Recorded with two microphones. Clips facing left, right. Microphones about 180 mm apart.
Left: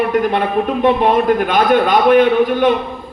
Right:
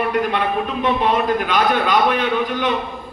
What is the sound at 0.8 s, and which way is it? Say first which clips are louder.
A man's voice: left 5 dB; 55° left (ahead or behind).